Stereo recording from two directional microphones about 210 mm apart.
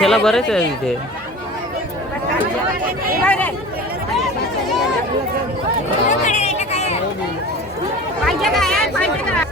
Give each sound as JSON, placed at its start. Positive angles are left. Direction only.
{"t": 0.0, "sound": "speech", "side_deg": 0}
{"t": 3.2, "sound": "speech", "side_deg": 5}
{"t": 6.1, "sound": "chatter", "side_deg": 35}
{"t": 8.2, "sound": "chatter", "side_deg": 0}